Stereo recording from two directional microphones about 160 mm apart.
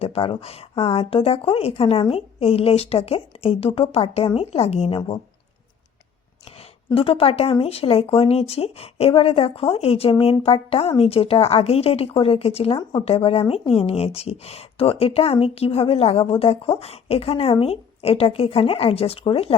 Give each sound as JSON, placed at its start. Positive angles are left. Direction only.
{"t": 0.0, "sound": "a woman's voice", "side_deg": 35}
{"t": 6.9, "sound": "a woman's voice", "side_deg": 35}